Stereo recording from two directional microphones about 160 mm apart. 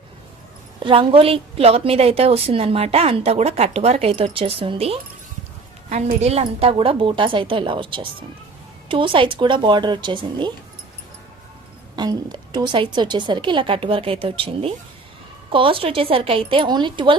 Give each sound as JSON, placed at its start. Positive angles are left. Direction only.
{"t": 0.8, "sound": "a woman's voice", "side_deg": -35}
{"t": 5.9, "sound": "a woman's voice", "side_deg": -45}
{"t": 11.9, "sound": "a woman's voice", "side_deg": -25}